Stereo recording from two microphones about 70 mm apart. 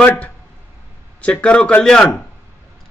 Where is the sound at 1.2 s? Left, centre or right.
Centre.